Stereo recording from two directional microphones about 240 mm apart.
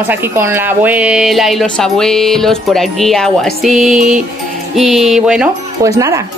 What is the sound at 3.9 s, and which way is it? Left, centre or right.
Music, right.